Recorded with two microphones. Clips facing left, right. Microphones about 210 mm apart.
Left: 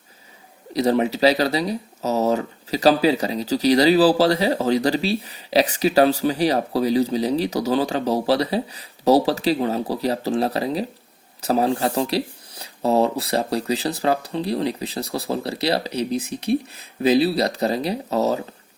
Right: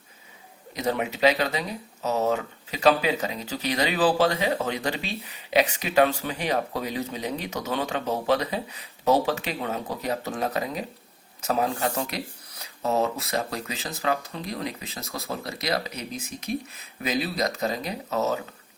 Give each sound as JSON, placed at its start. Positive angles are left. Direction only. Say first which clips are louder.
{"t": 0.7, "sound": "speech", "louder": "left 8 dB", "side_deg": 35}